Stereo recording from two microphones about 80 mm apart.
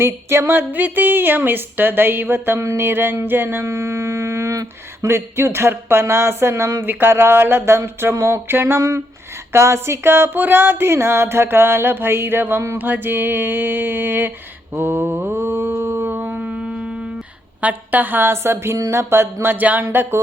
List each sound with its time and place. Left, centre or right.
0.0 s a woman's voice: right
3.7 s humming: right
5.0 s a woman's voice: right
14.8 s mantra: right; by 16.9 s centre
17.6 s a woman's voice: right